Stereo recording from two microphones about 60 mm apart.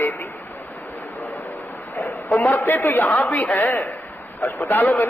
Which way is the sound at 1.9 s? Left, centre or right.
Left.